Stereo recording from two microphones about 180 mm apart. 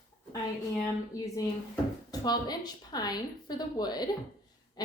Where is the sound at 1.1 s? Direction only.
20° left (ahead or behind).